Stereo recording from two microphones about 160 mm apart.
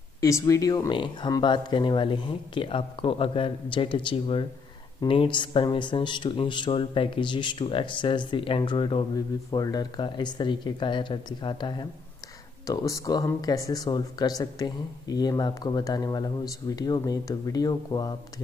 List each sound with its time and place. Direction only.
0.2 s speech: 20° left (ahead or behind)